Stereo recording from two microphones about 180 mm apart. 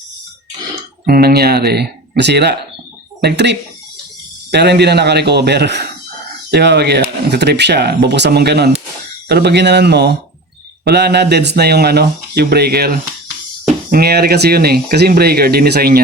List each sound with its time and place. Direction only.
1.0 s speech: 55° right (ahead or behind)